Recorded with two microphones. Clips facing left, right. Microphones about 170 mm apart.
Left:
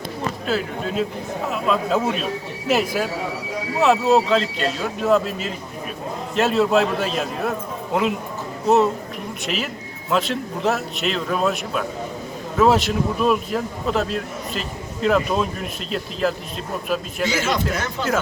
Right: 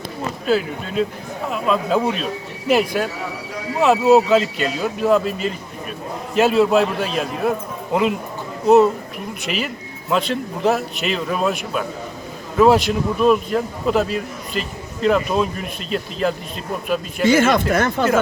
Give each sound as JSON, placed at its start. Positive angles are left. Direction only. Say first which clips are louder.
{"t": 0.4, "sound": "a man's voice", "louder": "right 5 dB", "side_deg": 0}
{"t": 8.6, "sound": "a man's voice", "louder": "right 4 dB", "side_deg": 0}
{"t": 10.1, "sound": "a man's voice", "louder": "right 1 dB", "side_deg": 0}
{"t": 17.2, "sound": "speech", "louder": "right 8 dB", "side_deg": -55}